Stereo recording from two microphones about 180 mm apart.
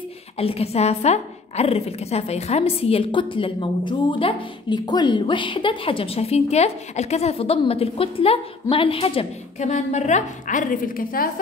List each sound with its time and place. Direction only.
0.4 s a woman's voice: 35° left (ahead or behind); by 11.2 s 50° left (ahead or behind)